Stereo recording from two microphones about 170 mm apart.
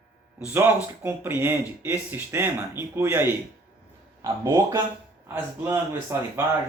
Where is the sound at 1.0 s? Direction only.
10° right (ahead or behind).